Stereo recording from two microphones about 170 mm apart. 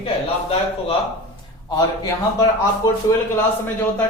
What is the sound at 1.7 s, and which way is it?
A man's voice, 20° left (ahead or behind).